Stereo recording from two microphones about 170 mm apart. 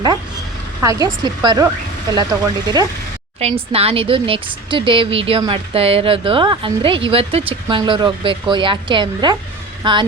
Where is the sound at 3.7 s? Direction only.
35° right (ahead or behind).